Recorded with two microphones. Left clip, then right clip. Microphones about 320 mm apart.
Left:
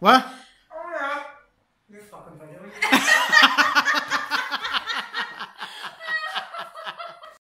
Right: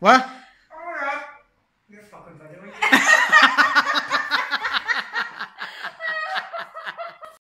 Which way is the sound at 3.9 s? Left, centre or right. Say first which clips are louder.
Right 2 dB; centre.